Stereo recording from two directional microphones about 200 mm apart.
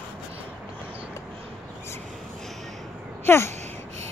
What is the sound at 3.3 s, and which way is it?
Speech, 10° left (ahead or behind).